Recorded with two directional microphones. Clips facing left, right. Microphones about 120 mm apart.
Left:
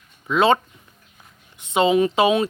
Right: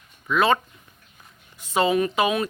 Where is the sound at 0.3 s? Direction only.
25° left (ahead or behind).